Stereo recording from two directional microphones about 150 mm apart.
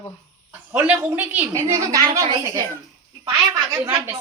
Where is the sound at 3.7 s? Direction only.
15° right (ahead or behind).